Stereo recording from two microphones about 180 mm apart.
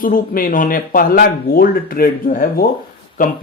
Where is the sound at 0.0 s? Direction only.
50° left (ahead or behind).